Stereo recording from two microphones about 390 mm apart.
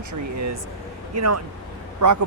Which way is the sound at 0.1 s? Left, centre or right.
Right.